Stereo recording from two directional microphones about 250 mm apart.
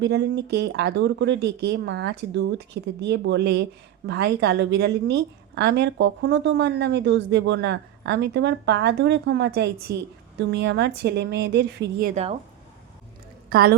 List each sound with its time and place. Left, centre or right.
0.0 s speech: right
13.5 s a woman's voice: right